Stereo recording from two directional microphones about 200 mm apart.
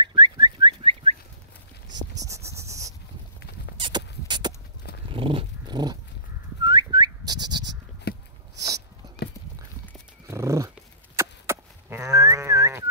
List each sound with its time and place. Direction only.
0.0 s bird: 20° right (ahead or behind)
2.1 s cricket: 15° right (ahead or behind)
3.7 s a sound: 25° right (ahead or behind)
5.1 s dog: 25° right (ahead or behind)
6.6 s turkey: 20° right (ahead or behind)
10.2 s dog: 15° right (ahead or behind)
11.1 s a sound: 15° right (ahead or behind)